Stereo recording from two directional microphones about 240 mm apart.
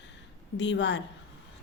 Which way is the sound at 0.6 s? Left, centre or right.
Left.